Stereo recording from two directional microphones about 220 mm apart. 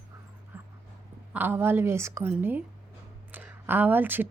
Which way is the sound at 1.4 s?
10° right (ahead or behind).